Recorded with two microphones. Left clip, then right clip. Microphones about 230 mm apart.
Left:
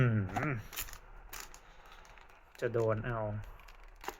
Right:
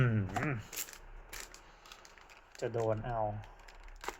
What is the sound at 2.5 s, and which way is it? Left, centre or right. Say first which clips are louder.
Speech: left 2 dB; centre.